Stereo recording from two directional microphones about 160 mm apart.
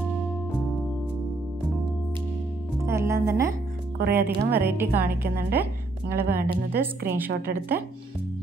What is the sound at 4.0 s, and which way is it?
Speech, 70° right (ahead or behind).